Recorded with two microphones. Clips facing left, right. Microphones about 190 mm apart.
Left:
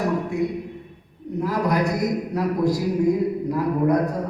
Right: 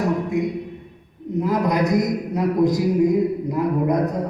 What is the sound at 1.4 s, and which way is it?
A man's voice, 20° right (ahead or behind).